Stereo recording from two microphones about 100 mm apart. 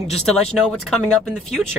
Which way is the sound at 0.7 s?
5° left (ahead or behind).